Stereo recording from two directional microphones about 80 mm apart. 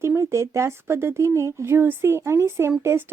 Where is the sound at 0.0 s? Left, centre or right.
Right.